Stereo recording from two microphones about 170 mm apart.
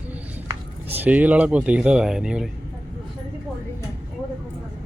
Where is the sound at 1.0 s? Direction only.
10° right (ahead or behind).